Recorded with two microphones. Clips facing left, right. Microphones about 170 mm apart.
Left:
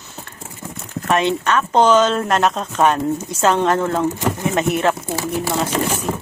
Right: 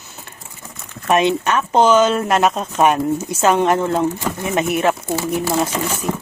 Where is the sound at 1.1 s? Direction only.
15° right (ahead or behind).